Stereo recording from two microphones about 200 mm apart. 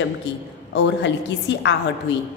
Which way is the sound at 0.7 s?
60° left (ahead or behind).